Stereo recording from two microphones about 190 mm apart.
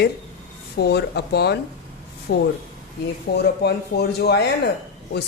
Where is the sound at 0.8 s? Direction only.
60° left (ahead or behind).